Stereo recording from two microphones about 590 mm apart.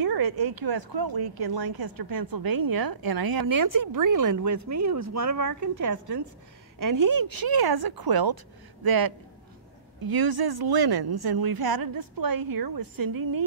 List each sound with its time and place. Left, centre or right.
0.0 s speech: right